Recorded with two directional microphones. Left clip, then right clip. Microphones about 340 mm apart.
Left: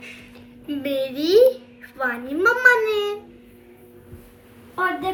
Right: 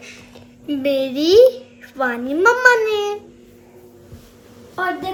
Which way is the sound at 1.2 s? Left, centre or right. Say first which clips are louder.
Right 5 dB; centre.